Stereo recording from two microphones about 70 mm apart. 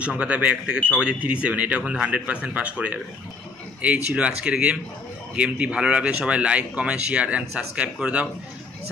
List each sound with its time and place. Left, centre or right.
0.0 s speech: centre